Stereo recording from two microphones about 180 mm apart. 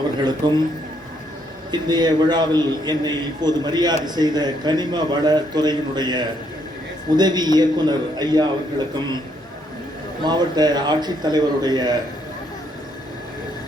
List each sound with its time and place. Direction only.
0.3 s a man's voice: 25° right (ahead or behind)
1.7 s a man's voice: 25° right (ahead or behind)
10.2 s a man's voice: 25° right (ahead or behind)